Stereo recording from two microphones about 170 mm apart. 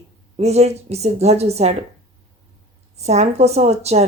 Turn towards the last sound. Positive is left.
turn(degrees=-40)  # may be behind; listen again after turning